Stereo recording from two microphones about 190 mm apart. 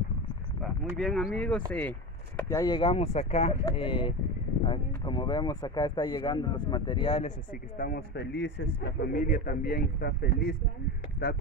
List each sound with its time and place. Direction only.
0.9 s speech: centre (ahead or behind)
1.7 s chop: 10° left (ahead or behind)
2.6 s speech: 25° left (ahead or behind)
7.7 s a man's voice: 50° left (ahead or behind)